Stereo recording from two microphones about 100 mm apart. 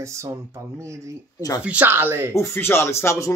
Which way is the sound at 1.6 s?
15° right (ahead or behind).